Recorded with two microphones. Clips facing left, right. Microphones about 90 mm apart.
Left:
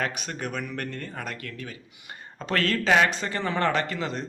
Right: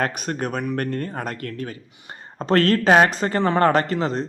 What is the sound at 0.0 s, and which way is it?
Speech, 45° right (ahead or behind).